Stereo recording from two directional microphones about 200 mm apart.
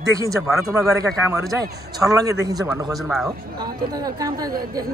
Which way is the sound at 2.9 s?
Centre (ahead or behind).